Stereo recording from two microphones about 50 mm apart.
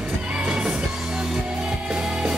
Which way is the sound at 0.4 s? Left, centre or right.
Centre.